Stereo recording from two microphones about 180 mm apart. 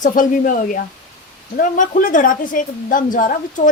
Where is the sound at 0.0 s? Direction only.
45° left (ahead or behind).